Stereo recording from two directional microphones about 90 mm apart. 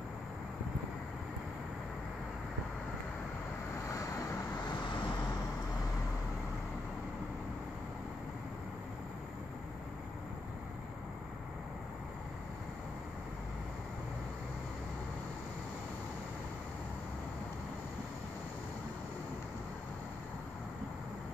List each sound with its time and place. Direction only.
3.9 s vehicle: 35° left (ahead or behind)
4.6 s vehicle: 60° left (ahead or behind)